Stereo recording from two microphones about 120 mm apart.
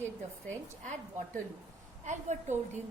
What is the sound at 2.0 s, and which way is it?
Speech, 80° right.